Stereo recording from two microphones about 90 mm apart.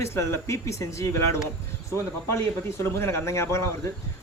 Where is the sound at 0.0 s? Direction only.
30° left (ahead or behind).